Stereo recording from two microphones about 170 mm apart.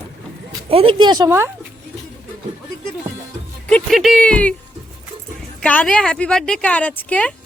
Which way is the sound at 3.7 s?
5° left (ahead or behind).